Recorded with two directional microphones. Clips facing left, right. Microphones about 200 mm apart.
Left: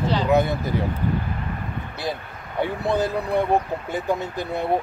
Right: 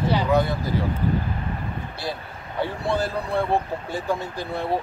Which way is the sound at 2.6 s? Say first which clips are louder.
Left 2 dB; 20° left (ahead or behind).